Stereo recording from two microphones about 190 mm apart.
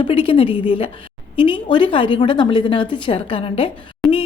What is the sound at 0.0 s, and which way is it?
A woman's voice, 30° left (ahead or behind).